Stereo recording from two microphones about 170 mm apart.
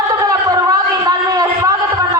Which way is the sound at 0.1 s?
20° right (ahead or behind).